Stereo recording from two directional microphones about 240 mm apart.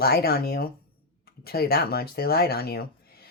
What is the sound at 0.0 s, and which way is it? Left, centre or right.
Speech, left.